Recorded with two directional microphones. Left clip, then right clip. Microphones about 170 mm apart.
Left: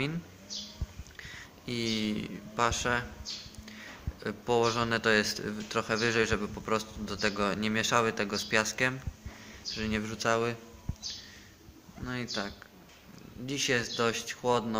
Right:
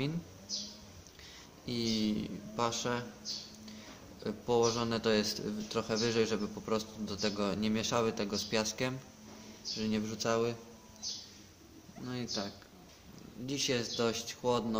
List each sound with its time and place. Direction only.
1.2 s speech: centre (ahead or behind)
12.1 s speech: 5° left (ahead or behind)